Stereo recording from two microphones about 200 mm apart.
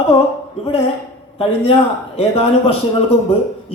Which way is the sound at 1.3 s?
30° left (ahead or behind).